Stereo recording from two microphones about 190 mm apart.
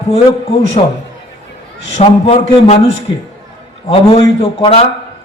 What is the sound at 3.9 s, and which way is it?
Speech, 30° left (ahead or behind).